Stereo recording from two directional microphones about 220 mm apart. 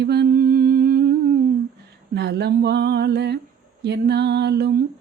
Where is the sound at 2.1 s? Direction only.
50° right (ahead or behind).